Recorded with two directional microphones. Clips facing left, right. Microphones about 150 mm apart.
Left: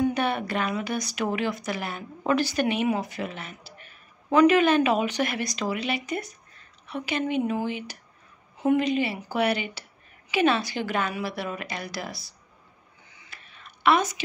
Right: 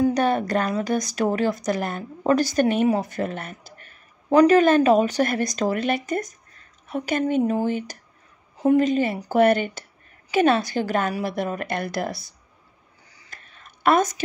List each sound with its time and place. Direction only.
0.1 s a woman's voice: 40° right (ahead or behind)
13.1 s whispering: 40° right (ahead or behind)